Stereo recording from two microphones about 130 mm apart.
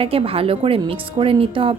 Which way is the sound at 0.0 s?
45° right (ahead or behind).